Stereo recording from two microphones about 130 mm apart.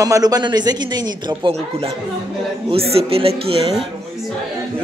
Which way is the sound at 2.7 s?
50° right (ahead or behind).